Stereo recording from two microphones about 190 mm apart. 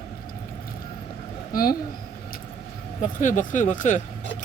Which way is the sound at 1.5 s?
50° left (ahead or behind).